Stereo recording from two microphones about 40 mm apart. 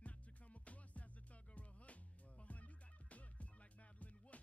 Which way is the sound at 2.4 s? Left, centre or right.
Left.